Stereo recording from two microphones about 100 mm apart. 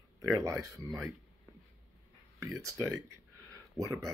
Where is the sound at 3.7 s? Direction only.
35° right (ahead or behind).